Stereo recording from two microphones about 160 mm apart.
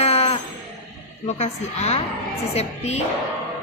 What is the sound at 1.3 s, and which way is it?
A woman's voice, 45° left (ahead or behind).